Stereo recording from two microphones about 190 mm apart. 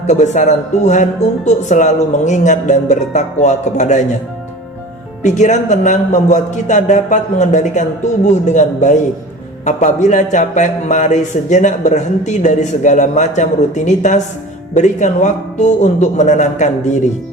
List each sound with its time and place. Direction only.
0.1 s speech: 40° left (ahead or behind)
5.2 s speech: 40° left (ahead or behind)